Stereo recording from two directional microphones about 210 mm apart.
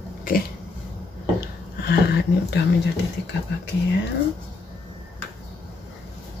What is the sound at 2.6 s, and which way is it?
Speech, 55° left (ahead or behind).